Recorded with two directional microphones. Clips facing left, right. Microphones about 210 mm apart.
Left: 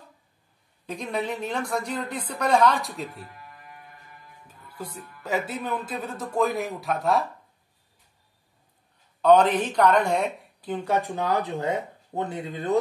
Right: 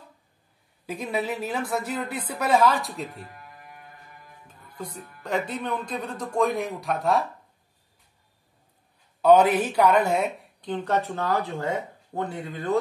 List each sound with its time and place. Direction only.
0.8 s speech: 5° right (ahead or behind)
4.5 s speech: 5° left (ahead or behind)
9.2 s speech: 10° right (ahead or behind); by 12.7 s 20° left (ahead or behind)